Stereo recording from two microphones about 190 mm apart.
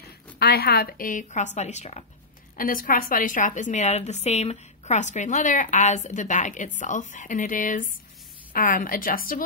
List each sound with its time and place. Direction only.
0.0 s a woman's voice: 55° left (ahead or behind); by 2.0 s 35° left (ahead or behind)
2.5 s a woman's voice: 50° left (ahead or behind)